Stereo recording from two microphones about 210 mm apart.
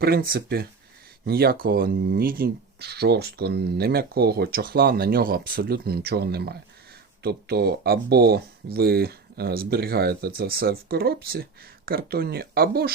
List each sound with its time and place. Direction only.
0.0 s speech: 45° right (ahead or behind)